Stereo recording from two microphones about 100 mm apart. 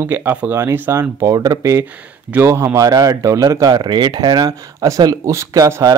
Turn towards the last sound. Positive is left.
turn(degrees=-35)  # may be behind; listen again after turning